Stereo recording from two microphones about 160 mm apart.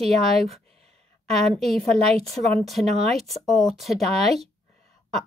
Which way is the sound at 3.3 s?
Centre (ahead or behind).